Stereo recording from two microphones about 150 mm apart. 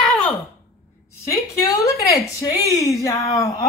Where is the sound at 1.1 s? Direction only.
20° left (ahead or behind).